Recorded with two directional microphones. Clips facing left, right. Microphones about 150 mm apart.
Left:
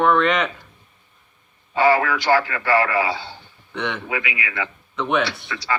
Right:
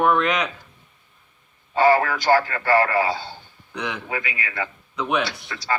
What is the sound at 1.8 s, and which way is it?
Speech, 40° right (ahead or behind).